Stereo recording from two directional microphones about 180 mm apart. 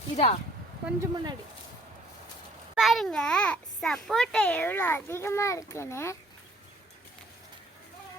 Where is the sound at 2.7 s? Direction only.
Centre (ahead or behind); by 6.1 s 15° left (ahead or behind).